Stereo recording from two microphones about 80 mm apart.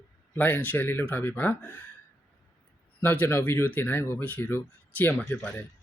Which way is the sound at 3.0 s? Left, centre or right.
Left.